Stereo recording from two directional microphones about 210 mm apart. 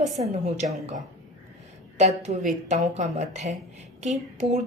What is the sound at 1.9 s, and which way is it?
A woman's voice, 30° right (ahead or behind).